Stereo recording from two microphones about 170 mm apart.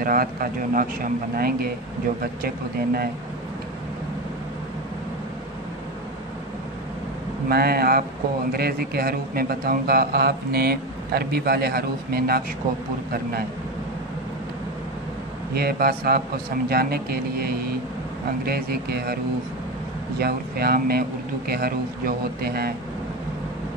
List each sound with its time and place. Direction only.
0.0 s a man's voice: 60° right (ahead or behind)
7.4 s a man's voice: 60° right (ahead or behind)
15.5 s a man's voice: 65° right (ahead or behind)
20.2 s a man's voice: 65° right (ahead or behind)